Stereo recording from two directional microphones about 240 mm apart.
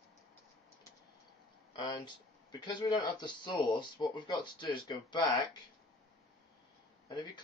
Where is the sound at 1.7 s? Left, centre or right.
Centre.